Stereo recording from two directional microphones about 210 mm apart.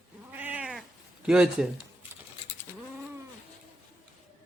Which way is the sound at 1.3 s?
5° right (ahead or behind).